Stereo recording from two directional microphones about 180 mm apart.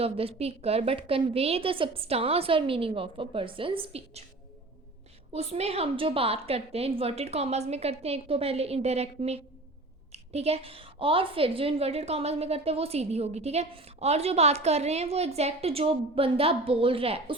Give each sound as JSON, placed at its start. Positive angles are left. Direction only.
{"t": 0.0, "sound": "a woman's voice", "side_deg": -35}
{"t": 5.3, "sound": "a woman's voice", "side_deg": -35}